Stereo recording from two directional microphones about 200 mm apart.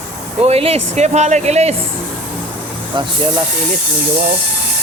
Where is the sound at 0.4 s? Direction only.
30° right (ahead or behind).